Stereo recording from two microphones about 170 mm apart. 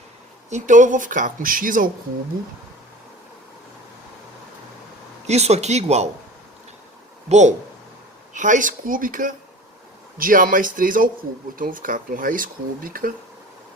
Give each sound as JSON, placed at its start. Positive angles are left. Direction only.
{"t": 0.5, "sound": "speech", "side_deg": -45}
{"t": 5.2, "sound": "speech", "side_deg": -40}
{"t": 7.3, "sound": "speech", "side_deg": -45}